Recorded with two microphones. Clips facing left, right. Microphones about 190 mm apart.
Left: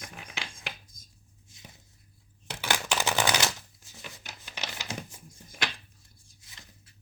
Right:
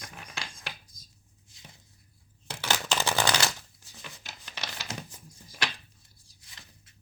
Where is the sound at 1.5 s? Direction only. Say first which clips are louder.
Left 2 dB; 20° left (ahead or behind).